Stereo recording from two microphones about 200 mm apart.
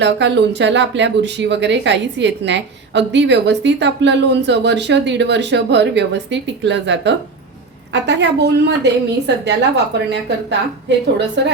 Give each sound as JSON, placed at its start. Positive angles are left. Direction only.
{"t": 0.0, "sound": "speech", "side_deg": -60}